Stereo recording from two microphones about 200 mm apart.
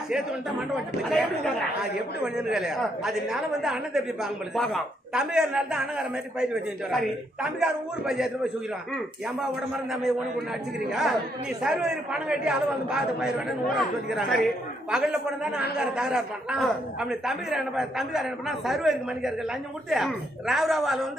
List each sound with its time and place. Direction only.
0.1 s a woman's voice: 5° right (ahead or behind)
10.9 s a woman's voice: centre (ahead or behind)